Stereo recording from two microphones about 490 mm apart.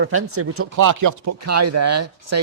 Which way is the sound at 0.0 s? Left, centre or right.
Right.